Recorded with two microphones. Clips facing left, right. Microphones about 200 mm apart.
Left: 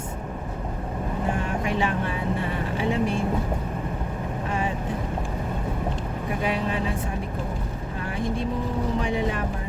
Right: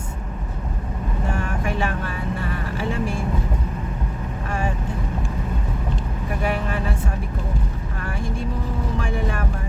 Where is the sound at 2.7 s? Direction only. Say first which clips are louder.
Left 2 dB; 20° left (ahead or behind).